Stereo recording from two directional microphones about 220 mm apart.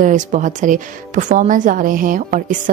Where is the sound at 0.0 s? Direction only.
35° right (ahead or behind).